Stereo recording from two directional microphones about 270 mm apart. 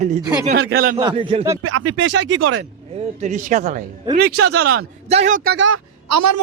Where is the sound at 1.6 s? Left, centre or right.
Right.